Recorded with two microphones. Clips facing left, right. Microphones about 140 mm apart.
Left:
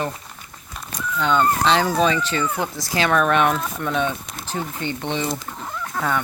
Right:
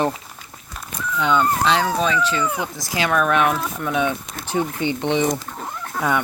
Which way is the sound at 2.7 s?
10° right (ahead or behind).